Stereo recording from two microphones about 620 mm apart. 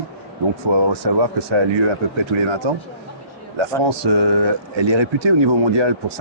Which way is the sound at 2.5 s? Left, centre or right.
Right.